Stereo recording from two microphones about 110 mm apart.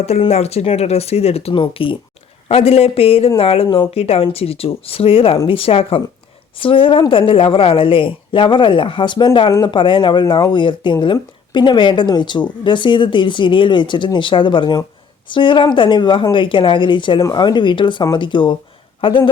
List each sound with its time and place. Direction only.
0.3 s speech: 75° left (ahead or behind); by 2.0 s 50° left (ahead or behind)
2.5 s a woman's voice: 65° left (ahead or behind); by 9.5 s 50° left (ahead or behind)
9.5 s a woman's voice: 35° left (ahead or behind)